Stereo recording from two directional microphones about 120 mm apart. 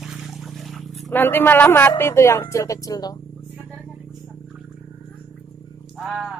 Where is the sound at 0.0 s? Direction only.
Centre (ahead or behind).